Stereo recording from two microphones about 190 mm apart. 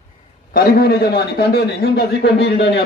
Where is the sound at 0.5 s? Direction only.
50° left (ahead or behind).